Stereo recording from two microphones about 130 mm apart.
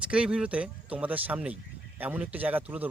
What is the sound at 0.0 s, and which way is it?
Speech, 10° right (ahead or behind).